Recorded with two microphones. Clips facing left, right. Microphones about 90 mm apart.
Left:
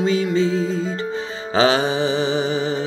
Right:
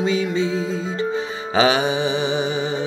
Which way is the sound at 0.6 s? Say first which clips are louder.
Left 1 dB; 35° left (ahead or behind).